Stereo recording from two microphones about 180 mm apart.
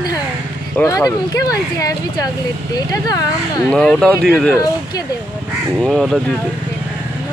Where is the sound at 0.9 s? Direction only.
20° left (ahead or behind).